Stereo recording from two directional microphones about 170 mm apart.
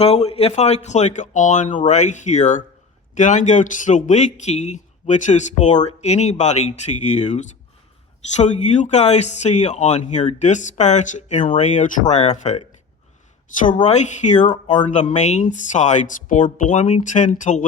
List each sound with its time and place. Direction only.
0.0 s speech: 35° left (ahead or behind)
13.8 s speech: 40° left (ahead or behind)